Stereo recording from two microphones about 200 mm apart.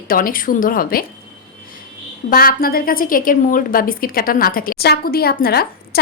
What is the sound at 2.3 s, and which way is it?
A woman's voice, 45° left (ahead or behind).